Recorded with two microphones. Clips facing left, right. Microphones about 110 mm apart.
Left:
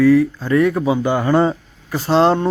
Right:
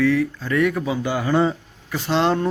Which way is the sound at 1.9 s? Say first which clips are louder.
Left 5 dB; 35° left (ahead or behind).